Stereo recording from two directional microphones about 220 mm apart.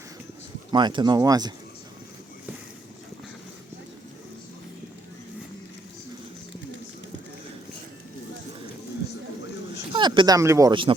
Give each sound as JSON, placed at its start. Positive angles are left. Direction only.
{"t": 0.7, "sound": "speech", "side_deg": -20}
{"t": 9.7, "sound": "speech", "side_deg": -20}